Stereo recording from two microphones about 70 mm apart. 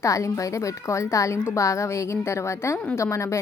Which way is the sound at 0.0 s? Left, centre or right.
Left.